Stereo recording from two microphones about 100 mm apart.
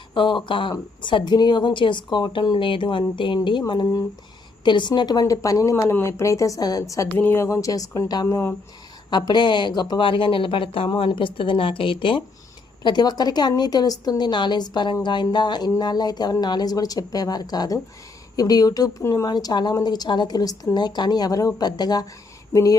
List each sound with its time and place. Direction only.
0.1 s a woman's voice: 55° left (ahead or behind); by 7.1 s 35° left (ahead or behind)
7.2 s speech: 20° left (ahead or behind); by 12.2 s 55° left (ahead or behind)
12.8 s a woman's voice: 45° left (ahead or behind)